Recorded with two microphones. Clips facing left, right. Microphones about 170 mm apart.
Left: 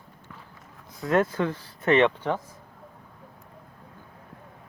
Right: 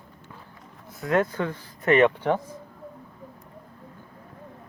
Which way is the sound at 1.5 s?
30° left (ahead or behind).